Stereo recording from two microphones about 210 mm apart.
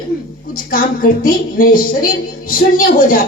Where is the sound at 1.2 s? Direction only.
40° left (ahead or behind).